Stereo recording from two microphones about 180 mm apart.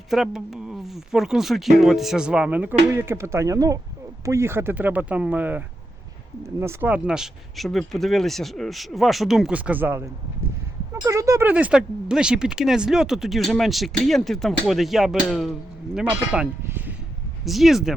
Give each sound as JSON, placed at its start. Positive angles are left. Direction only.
{"t": 0.1, "sound": "speech", "side_deg": 0}
{"t": 11.0, "sound": "speech", "side_deg": -15}